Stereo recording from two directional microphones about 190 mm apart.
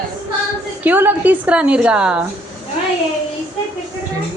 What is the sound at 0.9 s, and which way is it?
A woman's voice, 10° right (ahead or behind).